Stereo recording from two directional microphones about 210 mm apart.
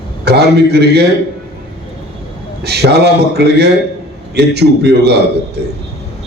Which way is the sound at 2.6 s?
50° right (ahead or behind).